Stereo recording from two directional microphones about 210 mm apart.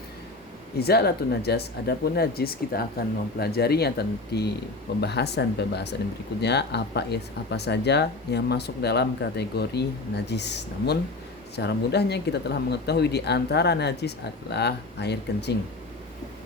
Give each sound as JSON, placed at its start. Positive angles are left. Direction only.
{"t": 0.8, "sound": "speech", "side_deg": 50}